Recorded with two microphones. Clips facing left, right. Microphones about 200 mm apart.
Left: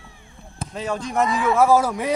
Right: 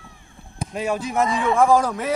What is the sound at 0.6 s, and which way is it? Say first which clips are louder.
Speech: right 2 dB; 10° right (ahead or behind).